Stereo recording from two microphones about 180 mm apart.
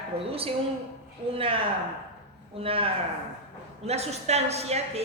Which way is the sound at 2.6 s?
30° right (ahead or behind).